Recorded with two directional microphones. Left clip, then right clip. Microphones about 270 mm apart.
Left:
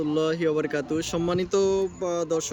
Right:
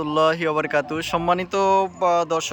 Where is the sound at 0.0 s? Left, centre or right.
Centre.